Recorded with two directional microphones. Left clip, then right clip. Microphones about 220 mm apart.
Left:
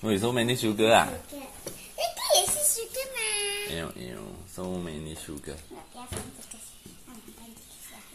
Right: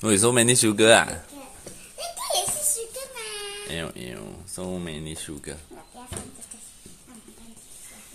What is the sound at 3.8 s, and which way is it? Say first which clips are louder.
Speech: right 3 dB; 30° right (ahead or behind).